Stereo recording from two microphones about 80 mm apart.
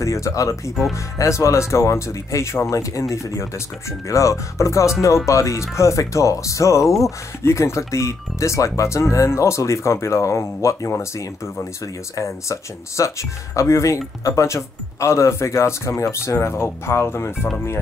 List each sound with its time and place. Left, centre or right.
0.0 s speech: left